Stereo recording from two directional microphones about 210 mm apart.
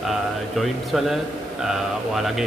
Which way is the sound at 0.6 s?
Centre (ahead or behind).